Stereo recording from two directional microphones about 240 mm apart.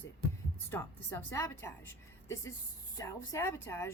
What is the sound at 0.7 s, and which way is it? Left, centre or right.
A woman's voice, centre.